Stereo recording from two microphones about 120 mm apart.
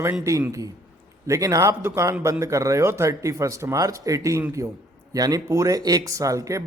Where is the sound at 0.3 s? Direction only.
25° right (ahead or behind).